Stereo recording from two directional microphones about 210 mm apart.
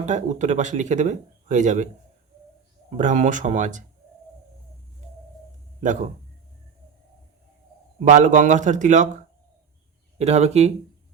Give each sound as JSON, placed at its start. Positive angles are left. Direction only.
{"t": 0.0, "sound": "speech", "side_deg": -35}
{"t": 3.0, "sound": "speech", "side_deg": -35}
{"t": 7.9, "sound": "speech", "side_deg": -35}
{"t": 10.2, "sound": "speech", "side_deg": -30}